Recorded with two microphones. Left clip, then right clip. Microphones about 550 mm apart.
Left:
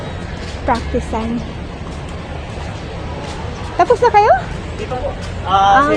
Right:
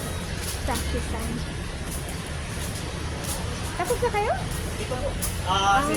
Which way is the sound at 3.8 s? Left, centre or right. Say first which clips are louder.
Left 15 dB; centre.